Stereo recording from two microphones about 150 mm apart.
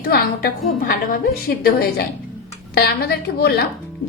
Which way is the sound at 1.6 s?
90° left.